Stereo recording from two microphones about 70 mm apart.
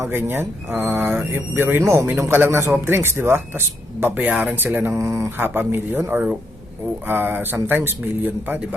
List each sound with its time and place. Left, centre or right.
0.0 s a man's voice: right
1.8 s a man's voice: right
4.9 s speech: right
5.4 s a man's voice: right